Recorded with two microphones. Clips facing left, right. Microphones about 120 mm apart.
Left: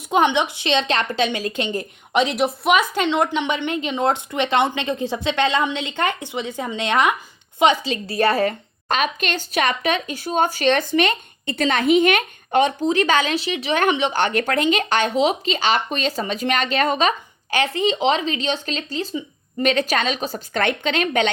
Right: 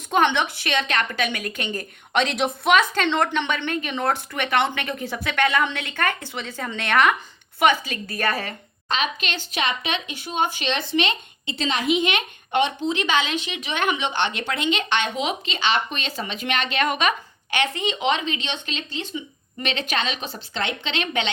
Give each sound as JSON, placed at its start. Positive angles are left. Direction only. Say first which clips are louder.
{"t": 0.1, "sound": "a woman's voice", "louder": "left 2 dB", "side_deg": 15}